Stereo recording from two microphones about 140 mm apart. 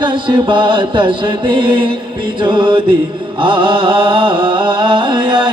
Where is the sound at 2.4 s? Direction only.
35° right (ahead or behind).